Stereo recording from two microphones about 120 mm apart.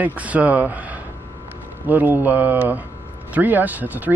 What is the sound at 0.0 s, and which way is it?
Speech, 10° right (ahead or behind).